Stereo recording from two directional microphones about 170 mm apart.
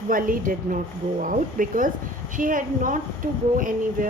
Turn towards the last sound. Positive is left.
turn(degrees=-50)  # may be behind; listen again after turning